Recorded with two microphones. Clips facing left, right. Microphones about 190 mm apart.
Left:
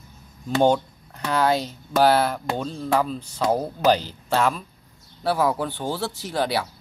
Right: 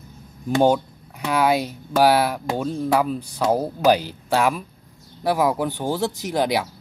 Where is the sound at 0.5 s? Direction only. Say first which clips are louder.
Right 1 dB; 10° right (ahead or behind).